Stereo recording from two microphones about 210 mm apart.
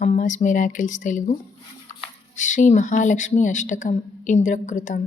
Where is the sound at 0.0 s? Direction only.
35° left (ahead or behind).